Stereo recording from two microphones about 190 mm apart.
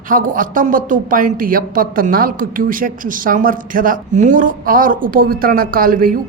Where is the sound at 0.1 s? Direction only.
45° right (ahead or behind).